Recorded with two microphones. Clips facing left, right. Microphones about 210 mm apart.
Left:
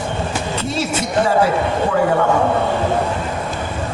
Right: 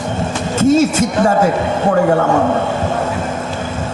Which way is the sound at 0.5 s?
45° right (ahead or behind).